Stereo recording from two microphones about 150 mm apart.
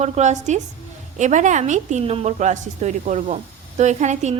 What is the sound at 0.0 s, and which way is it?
A woman's voice, 50° right (ahead or behind).